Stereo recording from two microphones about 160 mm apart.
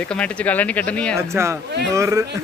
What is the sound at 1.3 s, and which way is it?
Speech, 15° right (ahead or behind).